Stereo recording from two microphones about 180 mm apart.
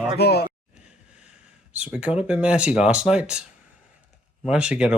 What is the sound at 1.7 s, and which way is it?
Speech, 5° right (ahead or behind).